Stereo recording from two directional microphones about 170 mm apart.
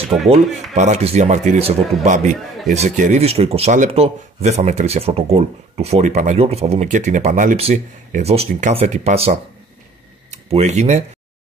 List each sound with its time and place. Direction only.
0.3 s speech: 45° right (ahead or behind)